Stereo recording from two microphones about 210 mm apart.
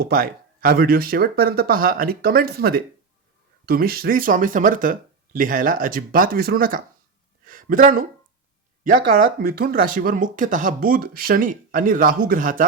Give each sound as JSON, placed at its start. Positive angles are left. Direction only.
{"t": 0.0, "sound": "speech", "side_deg": -45}
{"t": 7.4, "sound": "a sound", "side_deg": -40}
{"t": 8.8, "sound": "speech", "side_deg": -40}